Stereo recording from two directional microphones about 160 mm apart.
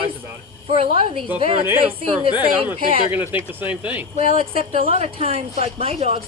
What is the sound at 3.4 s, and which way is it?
Speech, 10° right (ahead or behind).